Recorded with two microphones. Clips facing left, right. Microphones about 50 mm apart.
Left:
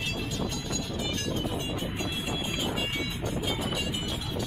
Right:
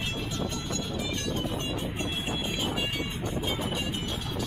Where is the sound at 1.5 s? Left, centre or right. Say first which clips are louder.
Even; centre.